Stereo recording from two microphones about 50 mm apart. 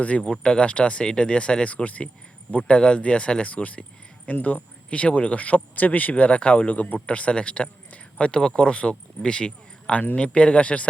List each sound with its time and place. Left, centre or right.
0.0 s speech: left
4.9 s speech: left